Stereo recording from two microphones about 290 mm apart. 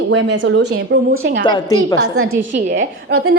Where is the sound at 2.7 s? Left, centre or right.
Right.